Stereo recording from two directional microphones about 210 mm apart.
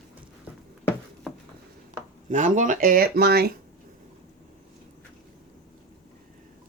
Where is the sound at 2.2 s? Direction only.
35° right (ahead or behind).